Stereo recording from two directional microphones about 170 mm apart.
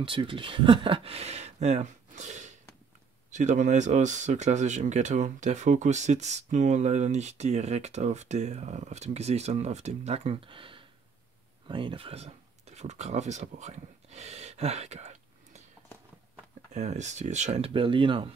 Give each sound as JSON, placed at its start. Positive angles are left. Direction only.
{"t": 0.0, "sound": "speech", "side_deg": -30}
{"t": 16.7, "sound": "speech", "side_deg": -45}